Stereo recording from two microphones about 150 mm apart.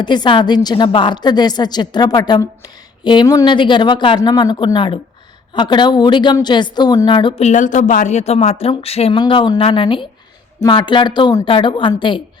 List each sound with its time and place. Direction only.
0.0 s a woman's voice: 30° left (ahead or behind)
7.4 s speech: 55° left (ahead or behind); by 12.2 s 35° left (ahead or behind)